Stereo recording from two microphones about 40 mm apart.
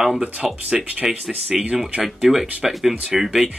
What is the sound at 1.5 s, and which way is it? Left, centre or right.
Speech, centre.